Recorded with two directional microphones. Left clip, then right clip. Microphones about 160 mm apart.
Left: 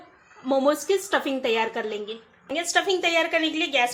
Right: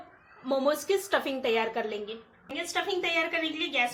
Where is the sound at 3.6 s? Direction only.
70° left (ahead or behind).